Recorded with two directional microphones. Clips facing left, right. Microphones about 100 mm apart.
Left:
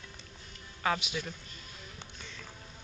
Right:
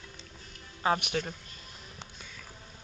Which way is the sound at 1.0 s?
60° right (ahead or behind).